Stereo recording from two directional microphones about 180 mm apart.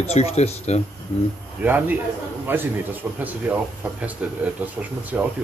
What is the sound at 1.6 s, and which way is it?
A man's voice, 10° right (ahead or behind).